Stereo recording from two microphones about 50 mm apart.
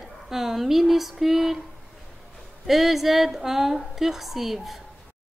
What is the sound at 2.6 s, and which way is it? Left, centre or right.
Speech, centre.